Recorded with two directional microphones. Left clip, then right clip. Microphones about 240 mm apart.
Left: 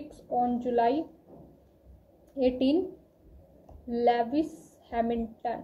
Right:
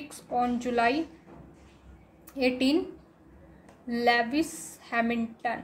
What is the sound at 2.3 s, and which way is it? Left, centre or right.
Speech, right.